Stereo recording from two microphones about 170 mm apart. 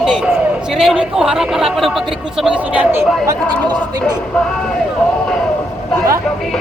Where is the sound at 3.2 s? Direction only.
20° right (ahead or behind).